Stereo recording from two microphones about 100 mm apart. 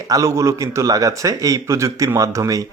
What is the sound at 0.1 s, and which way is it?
Speech, 35° right (ahead or behind).